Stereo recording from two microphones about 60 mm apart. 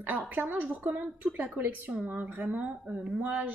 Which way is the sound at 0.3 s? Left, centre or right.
Right.